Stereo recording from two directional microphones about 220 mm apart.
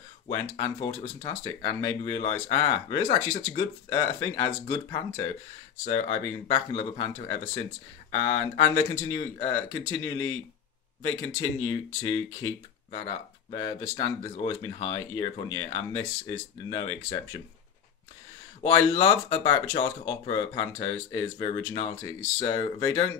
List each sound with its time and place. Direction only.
0.3 s speech: 25° left (ahead or behind)
5.9 s speech: 30° left (ahead or behind)
10.1 s speech: 65° left (ahead or behind)
11.0 s speech: 15° left (ahead or behind)
18.6 s speech: 20° left (ahead or behind)